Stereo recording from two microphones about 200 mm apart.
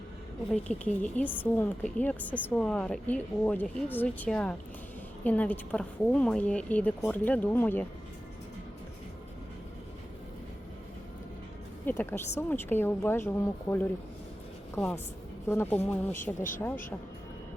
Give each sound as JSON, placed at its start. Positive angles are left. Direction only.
{"t": 0.5, "sound": "a woman's voice", "side_deg": 5}
{"t": 11.9, "sound": "a woman's voice", "side_deg": 10}
{"t": 16.2, "sound": "speech", "side_deg": 40}